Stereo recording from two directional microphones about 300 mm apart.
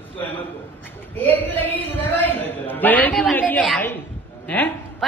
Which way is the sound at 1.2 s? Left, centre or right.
Centre.